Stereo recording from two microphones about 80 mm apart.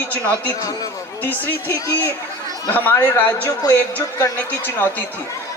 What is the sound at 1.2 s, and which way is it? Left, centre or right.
A man's voice, left.